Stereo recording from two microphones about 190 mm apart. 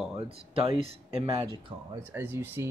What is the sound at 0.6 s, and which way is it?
Speech, 30° right (ahead or behind).